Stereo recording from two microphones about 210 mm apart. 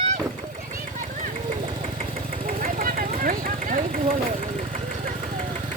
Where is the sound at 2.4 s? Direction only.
40° right (ahead or behind).